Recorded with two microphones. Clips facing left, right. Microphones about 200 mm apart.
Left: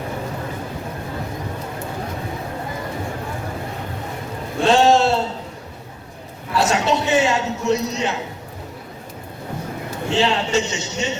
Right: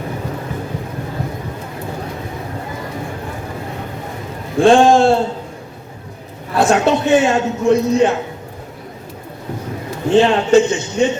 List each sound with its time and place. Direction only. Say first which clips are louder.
4.6 s a sound: right 5 dB; 50° right (ahead or behind)
6.5 s a man's voice: right 5 dB; 50° right (ahead or behind)
10.1 s a man's voice: right 8 dB; 50° right (ahead or behind)